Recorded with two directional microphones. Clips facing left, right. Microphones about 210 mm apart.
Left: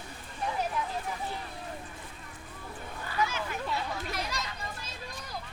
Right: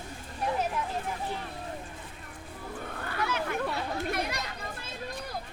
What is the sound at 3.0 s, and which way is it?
Children playing, 60° right (ahead or behind).